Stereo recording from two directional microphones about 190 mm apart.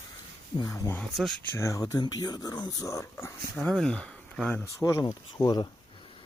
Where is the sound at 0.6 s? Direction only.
20° left (ahead or behind).